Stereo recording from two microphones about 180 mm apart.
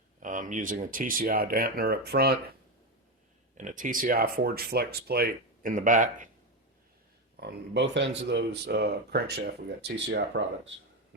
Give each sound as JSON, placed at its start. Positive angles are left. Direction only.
{"t": 0.2, "sound": "speech", "side_deg": -45}
{"t": 3.6, "sound": "speech", "side_deg": -45}
{"t": 7.3, "sound": "speech", "side_deg": -70}